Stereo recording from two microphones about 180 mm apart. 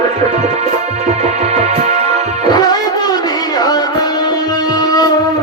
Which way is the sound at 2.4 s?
20° left (ahead or behind).